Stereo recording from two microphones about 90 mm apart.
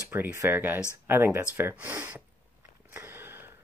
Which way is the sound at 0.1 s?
20° right (ahead or behind).